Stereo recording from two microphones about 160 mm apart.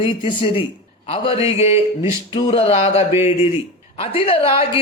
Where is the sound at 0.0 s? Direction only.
30° left (ahead or behind).